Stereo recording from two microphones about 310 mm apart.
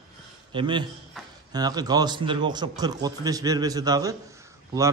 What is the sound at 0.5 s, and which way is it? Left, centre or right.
A man's voice, centre.